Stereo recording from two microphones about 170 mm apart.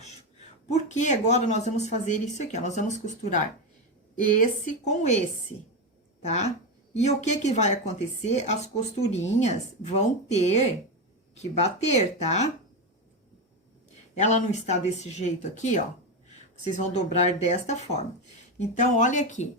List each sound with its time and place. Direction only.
0.7 s speech: 45° left (ahead or behind)
6.2 s speech: 40° left (ahead or behind)
14.2 s speech: 45° left (ahead or behind)